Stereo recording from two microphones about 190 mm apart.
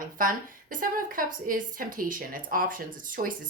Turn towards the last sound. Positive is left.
turn(degrees=-45)  # may be behind; listen again after turning